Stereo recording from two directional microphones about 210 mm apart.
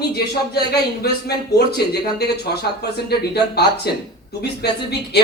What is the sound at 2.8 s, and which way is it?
Speech, 50° left (ahead or behind).